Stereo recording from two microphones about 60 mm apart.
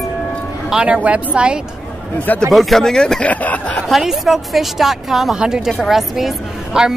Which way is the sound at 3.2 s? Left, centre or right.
Left.